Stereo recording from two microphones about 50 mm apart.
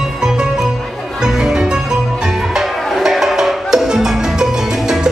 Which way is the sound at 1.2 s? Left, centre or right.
Centre.